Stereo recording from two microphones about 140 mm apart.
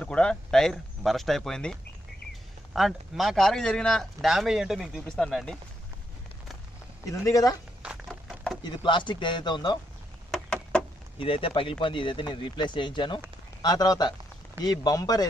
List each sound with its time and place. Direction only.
0.0 s speech: 5° left (ahead or behind)
7.1 s speech: 25° left (ahead or behind)
8.1 s a sound: 5° left (ahead or behind)
8.6 s speech: 35° left (ahead or behind)
10.3 s a sound: 5° left (ahead or behind)
11.1 s speech: 40° left (ahead or behind)